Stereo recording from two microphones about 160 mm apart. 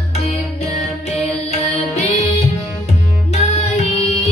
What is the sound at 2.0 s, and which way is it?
Music, 40° left (ahead or behind).